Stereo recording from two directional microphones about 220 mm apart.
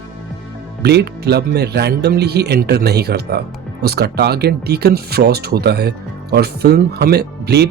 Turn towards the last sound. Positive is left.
turn(degrees=-45)  # may be behind; listen again after turning